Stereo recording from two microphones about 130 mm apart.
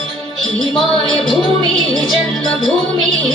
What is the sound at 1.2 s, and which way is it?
Music, centre (ahead or behind).